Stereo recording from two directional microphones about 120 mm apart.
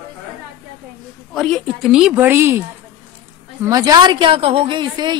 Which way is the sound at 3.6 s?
30° right (ahead or behind).